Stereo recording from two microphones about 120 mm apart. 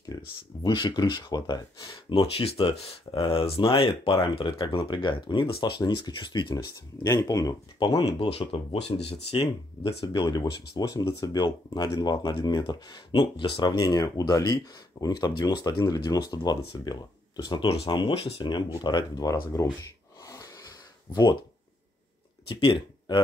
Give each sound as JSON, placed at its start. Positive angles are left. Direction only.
{"t": 0.1, "sound": "speech", "side_deg": 35}
{"t": 2.3, "sound": "speech", "side_deg": 55}
{"t": 8.2, "sound": "speech", "side_deg": 50}
{"t": 10.0, "sound": "speech", "side_deg": 35}
{"t": 20.2, "sound": "wheeze", "side_deg": 30}
{"t": 21.1, "sound": "speech", "side_deg": 35}
{"t": 22.5, "sound": "speech", "side_deg": 45}